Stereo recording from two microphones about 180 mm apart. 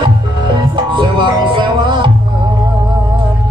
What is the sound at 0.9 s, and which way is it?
Music, 25° right (ahead or behind).